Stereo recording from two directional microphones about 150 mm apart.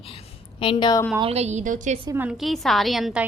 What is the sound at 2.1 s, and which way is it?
Speech, 10° right (ahead or behind).